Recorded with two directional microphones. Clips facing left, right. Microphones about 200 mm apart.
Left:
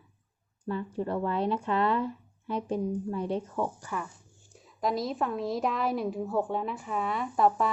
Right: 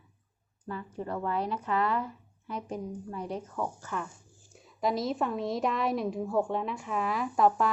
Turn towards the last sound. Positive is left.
turn(degrees=0)  # may be behind; listen again after turning